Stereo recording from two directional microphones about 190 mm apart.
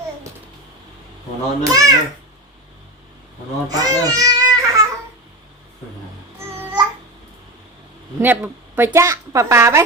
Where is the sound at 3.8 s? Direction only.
20° right (ahead or behind).